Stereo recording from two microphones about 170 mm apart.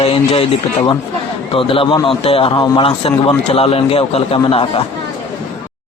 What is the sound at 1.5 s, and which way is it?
A man's voice, 30° left (ahead or behind).